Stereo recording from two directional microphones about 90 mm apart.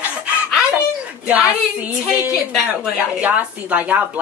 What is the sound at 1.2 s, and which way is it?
Speech, 15° right (ahead or behind).